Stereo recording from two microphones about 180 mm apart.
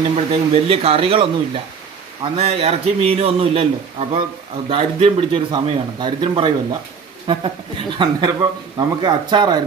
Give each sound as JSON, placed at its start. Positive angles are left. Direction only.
{"t": 0.1, "sound": "speech", "side_deg": -35}
{"t": 4.6, "sound": "speech", "side_deg": -30}